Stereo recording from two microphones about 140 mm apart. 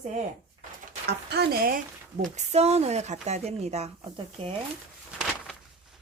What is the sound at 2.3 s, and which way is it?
A woman's voice, 50° right (ahead or behind).